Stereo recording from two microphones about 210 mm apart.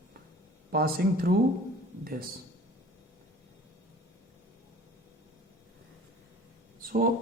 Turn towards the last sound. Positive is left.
turn(degrees=-40)  # may be behind; listen again after turning